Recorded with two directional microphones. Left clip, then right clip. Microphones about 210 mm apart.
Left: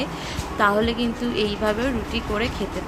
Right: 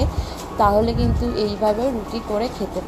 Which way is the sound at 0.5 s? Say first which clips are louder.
Right 3 dB; 15° left (ahead or behind).